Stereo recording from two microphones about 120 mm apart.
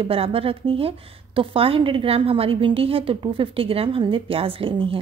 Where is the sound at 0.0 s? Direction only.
50° right (ahead or behind).